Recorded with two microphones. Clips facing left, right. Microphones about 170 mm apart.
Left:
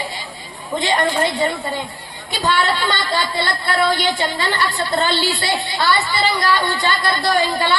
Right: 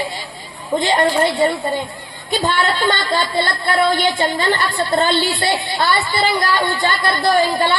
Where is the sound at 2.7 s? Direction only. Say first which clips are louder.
Right 3 dB; 50° right (ahead or behind).